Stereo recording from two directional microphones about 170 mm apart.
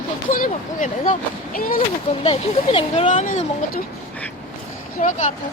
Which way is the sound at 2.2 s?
35° left (ahead or behind).